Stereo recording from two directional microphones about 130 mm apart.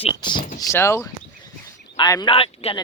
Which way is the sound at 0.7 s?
20° left (ahead or behind).